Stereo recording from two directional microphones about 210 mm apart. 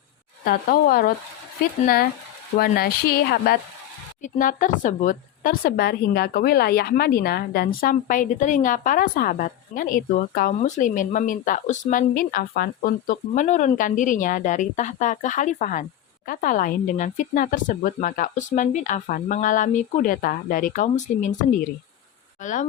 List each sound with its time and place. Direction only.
0.4 s speech: 45° left (ahead or behind)
2.6 s speech: 45° left (ahead or behind)
4.2 s speech: 40° left (ahead or behind)